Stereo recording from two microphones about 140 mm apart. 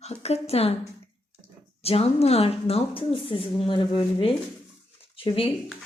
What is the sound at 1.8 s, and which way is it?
Speech, 45° left (ahead or behind).